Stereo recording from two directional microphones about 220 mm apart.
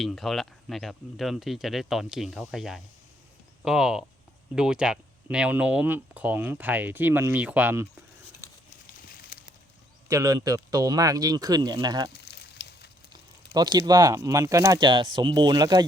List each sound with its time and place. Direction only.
0.0 s speech: centre (ahead or behind)
10.1 s speech: 15° right (ahead or behind)
12.1 s a sound: 50° left (ahead or behind)
13.5 s speech: 20° right (ahead or behind)